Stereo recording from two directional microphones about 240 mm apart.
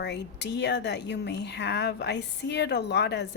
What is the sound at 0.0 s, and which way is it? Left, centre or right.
Speech, left.